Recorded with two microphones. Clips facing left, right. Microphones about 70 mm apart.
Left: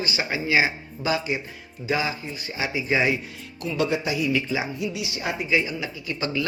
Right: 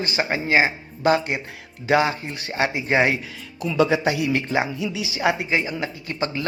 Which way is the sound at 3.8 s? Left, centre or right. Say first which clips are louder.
Right 3 dB; right.